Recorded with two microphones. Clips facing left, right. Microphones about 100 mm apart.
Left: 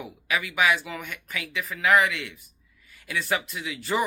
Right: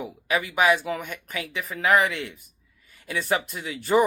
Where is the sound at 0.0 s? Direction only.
35° right (ahead or behind).